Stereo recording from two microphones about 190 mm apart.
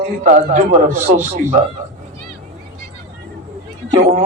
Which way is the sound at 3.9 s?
35° right (ahead or behind).